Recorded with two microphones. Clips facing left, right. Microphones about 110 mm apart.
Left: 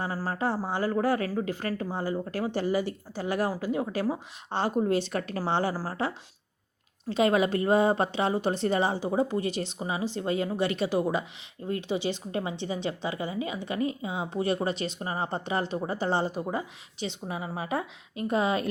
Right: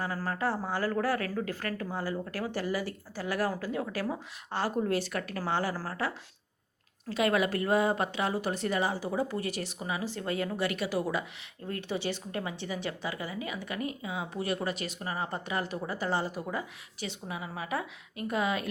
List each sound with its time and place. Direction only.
0.3 s a woman's voice: 20° left (ahead or behind)
7.1 s a woman's voice: 25° left (ahead or behind)